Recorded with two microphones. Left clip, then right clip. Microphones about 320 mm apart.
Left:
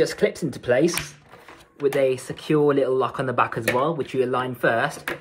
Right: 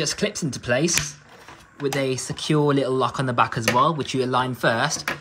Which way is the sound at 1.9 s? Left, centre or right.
Centre.